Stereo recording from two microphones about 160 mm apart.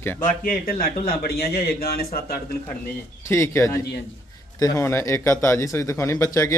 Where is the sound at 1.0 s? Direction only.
70° left (ahead or behind).